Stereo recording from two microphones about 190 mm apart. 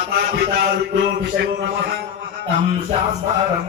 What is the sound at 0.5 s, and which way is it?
Speech, 60° right (ahead or behind).